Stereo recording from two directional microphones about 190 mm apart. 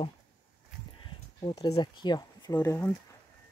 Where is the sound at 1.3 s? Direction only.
25° left (ahead or behind).